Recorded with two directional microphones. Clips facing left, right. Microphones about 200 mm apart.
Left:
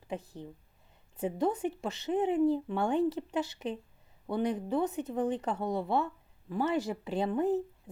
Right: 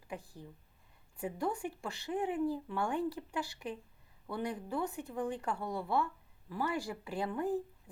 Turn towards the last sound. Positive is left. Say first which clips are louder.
# left 6 dB
turn(degrees=25)  # may be behind; listen again after turning